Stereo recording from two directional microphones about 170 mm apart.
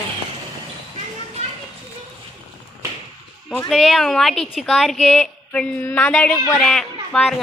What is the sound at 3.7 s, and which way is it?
A woman's voice, centre (ahead or behind).